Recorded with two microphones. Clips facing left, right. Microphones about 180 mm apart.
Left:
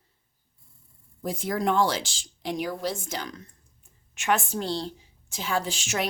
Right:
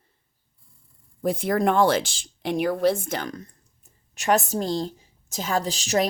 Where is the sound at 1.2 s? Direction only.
60° right (ahead or behind).